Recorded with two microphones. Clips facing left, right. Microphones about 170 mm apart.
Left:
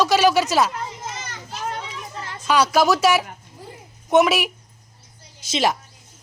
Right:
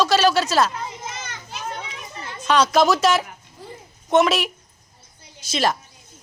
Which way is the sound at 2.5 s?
10° left (ahead or behind).